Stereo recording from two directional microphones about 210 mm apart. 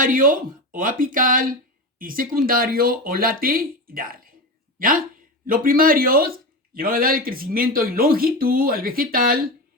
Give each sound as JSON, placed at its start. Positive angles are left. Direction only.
{"t": 0.0, "sound": "a man's voice", "side_deg": -40}